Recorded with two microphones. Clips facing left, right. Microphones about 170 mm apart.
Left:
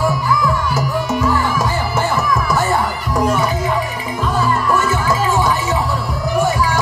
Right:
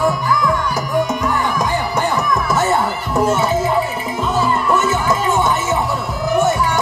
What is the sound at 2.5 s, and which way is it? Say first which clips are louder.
Crowd: right 1 dB; centre (ahead or behind).